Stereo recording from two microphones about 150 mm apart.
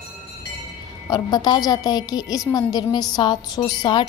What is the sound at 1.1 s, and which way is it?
A woman's voice, 25° left (ahead or behind).